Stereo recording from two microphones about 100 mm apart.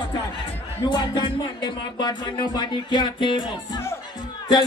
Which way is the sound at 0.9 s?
50° left (ahead or behind).